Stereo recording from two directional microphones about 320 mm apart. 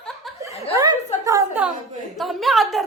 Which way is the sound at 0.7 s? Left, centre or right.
Centre.